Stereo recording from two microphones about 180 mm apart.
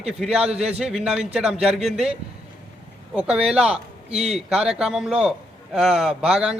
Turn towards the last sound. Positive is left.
turn(degrees=-5)  # may be behind; listen again after turning